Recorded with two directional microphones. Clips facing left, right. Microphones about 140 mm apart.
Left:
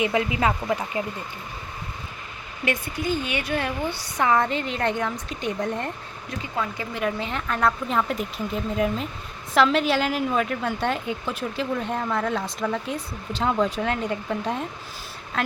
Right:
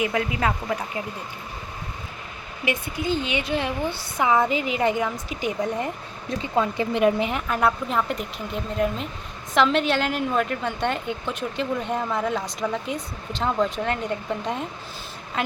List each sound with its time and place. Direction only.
0.0 s a woman's voice: 5° left (ahead or behind)
3.2 s a woman's voice: 15° right (ahead or behind)
6.4 s a woman's voice: 25° right (ahead or behind); by 15.5 s centre (ahead or behind)